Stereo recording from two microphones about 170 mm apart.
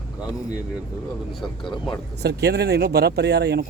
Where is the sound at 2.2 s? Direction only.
75° right (ahead or behind).